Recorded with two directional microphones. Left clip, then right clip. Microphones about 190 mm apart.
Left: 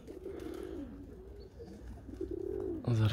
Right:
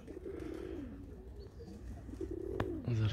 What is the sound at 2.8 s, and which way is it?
Bird, 45° left (ahead or behind).